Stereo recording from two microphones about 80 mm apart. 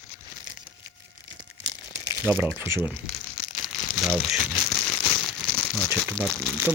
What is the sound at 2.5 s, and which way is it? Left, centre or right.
Speech, right.